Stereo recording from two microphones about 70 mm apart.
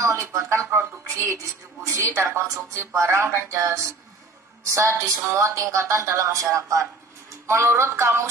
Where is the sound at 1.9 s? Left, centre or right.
Right.